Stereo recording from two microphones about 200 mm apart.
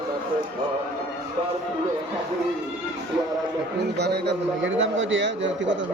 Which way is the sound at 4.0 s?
55° right (ahead or behind).